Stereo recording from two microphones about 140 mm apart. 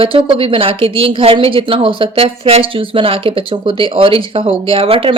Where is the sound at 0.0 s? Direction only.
40° right (ahead or behind).